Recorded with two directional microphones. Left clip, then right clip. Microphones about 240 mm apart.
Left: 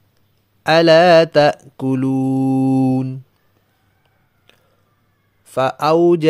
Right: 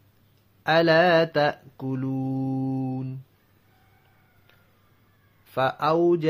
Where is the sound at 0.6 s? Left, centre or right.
Left.